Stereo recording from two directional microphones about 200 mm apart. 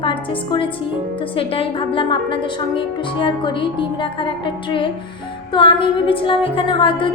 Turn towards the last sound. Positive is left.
turn(degrees=25)  # may be behind; listen again after turning